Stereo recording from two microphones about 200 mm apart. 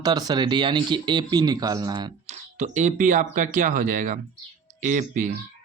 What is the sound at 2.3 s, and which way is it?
Speech, 35° right (ahead or behind).